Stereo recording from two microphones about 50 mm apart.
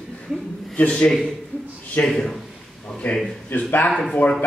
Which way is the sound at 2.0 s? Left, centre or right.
Centre.